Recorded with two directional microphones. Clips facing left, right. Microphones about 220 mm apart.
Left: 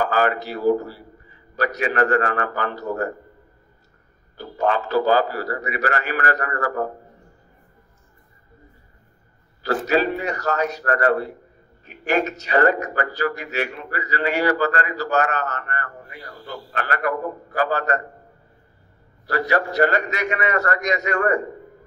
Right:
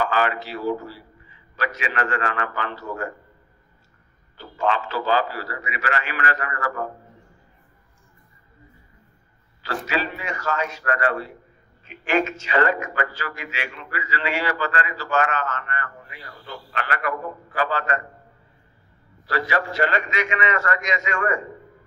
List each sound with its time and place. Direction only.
0.0 s speech: 45° left (ahead or behind)
4.4 s speech: 40° left (ahead or behind)
9.8 s speech: 45° left (ahead or behind)
19.2 s speech: 40° left (ahead or behind)